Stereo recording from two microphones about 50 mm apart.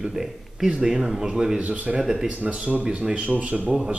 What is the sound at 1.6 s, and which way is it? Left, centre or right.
Speech, right.